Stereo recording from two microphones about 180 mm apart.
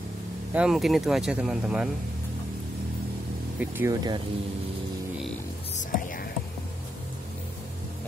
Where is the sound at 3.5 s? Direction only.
10° right (ahead or behind).